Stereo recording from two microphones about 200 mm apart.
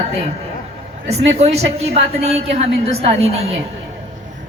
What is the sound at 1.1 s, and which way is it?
A woman's voice, 30° right (ahead or behind).